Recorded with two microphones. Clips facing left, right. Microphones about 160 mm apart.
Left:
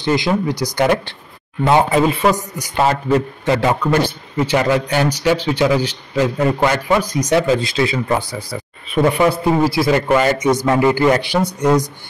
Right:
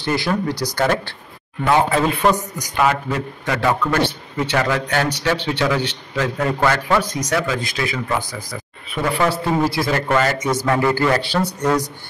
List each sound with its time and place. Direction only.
0.0 s a man's voice: 15° left (ahead or behind)
2.0 s a woman's voice: 5° left (ahead or behind)
2.7 s a man's voice: 30° left (ahead or behind)
9.1 s a man's voice: 15° left (ahead or behind)